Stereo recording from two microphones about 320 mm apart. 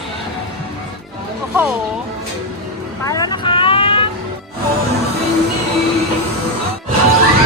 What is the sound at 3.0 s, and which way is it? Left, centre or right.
Vehicle, centre.